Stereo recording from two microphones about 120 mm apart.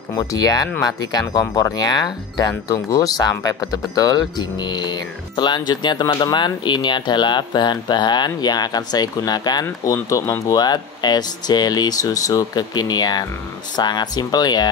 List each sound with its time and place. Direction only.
0.1 s speech: 30° left (ahead or behind)